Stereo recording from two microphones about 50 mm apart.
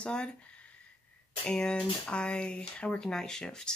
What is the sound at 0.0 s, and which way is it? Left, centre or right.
Speech, centre.